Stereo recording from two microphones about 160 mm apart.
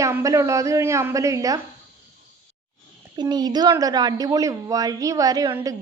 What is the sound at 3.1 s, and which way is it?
A woman's voice, 25° right (ahead or behind).